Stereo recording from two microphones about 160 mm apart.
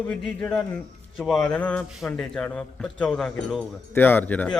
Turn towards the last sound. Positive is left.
turn(degrees=10)  # may be behind; listen again after turning